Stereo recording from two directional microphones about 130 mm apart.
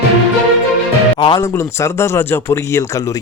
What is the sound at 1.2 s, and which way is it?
Speech, 40° left (ahead or behind).